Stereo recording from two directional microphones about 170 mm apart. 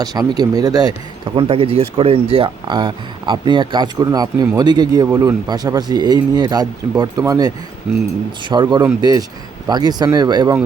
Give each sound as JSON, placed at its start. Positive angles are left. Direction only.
{"t": 0.0, "sound": "speech", "side_deg": -25}